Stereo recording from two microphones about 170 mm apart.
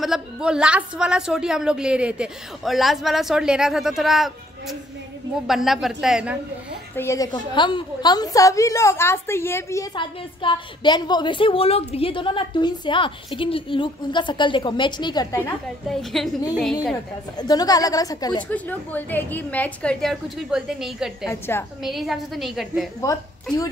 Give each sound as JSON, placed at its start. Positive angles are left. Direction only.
{"t": 0.0, "sound": "a woman's voice", "side_deg": -5}
{"t": 7.0, "sound": "a woman's voice", "side_deg": 15}
{"t": 7.5, "sound": "a woman's voice", "side_deg": 25}
{"t": 9.9, "sound": "a woman's voice", "side_deg": 30}
{"t": 15.9, "sound": "a woman's voice", "side_deg": 0}
{"t": 16.9, "sound": "a woman's voice", "side_deg": 20}
{"t": 18.5, "sound": "a woman's voice", "side_deg": 10}
{"t": 21.3, "sound": "a woman's voice", "side_deg": 15}
{"t": 21.8, "sound": "a woman's voice", "side_deg": 0}